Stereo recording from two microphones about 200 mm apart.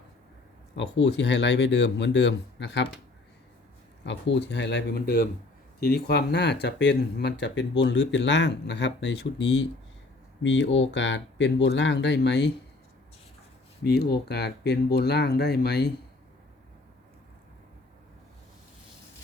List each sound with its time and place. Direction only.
0.8 s speech: 60° left (ahead or behind)
4.0 s speech: 65° left (ahead or behind)
13.8 s speech: 50° left (ahead or behind)